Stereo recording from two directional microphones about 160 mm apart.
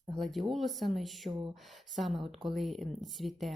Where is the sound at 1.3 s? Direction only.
30° right (ahead or behind).